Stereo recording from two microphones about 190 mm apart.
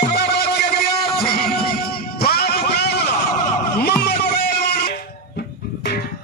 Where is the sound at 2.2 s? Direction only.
55° left (ahead or behind).